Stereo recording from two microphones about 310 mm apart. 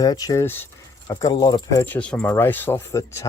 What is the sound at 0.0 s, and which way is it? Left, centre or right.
Speech, centre.